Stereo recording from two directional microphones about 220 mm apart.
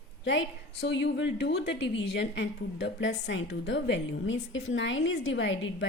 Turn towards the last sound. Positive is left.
turn(degrees=60)  # may be behind; listen again after turning